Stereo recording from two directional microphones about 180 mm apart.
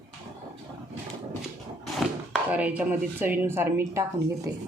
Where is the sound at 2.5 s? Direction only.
5° right (ahead or behind).